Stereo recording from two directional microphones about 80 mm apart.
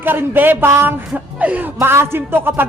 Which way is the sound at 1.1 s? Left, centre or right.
Centre.